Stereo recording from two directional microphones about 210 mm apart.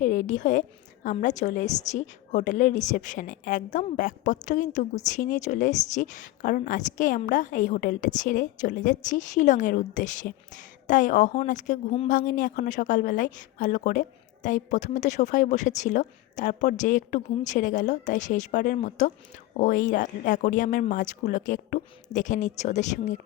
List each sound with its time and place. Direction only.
0.0 s a woman's voice: 40° left (ahead or behind)